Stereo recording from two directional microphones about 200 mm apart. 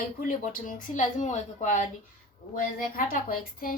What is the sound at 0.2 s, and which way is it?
A woman's voice, 45° left (ahead or behind).